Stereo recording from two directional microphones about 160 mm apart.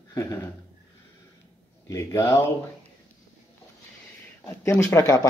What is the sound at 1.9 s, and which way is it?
Speech, 20° left (ahead or behind).